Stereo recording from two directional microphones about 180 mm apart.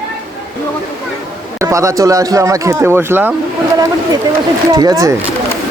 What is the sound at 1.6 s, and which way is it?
Speech, 15° right (ahead or behind).